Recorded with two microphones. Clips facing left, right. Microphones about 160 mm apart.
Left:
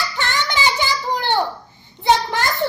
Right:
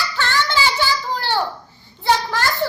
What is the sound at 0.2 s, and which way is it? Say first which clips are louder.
Child singing: right 2 dB; 20° left (ahead or behind).